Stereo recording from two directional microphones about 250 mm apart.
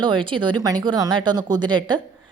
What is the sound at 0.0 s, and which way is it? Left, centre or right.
A woman's voice, centre.